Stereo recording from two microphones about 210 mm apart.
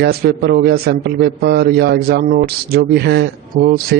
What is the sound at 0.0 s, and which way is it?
A man's voice, 50° right (ahead or behind).